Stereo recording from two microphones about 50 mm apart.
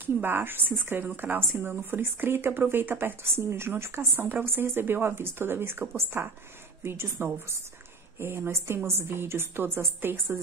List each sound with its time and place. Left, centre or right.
0.0 s a woman's voice: right